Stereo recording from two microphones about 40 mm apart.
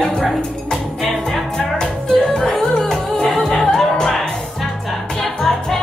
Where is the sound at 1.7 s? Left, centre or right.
Centre.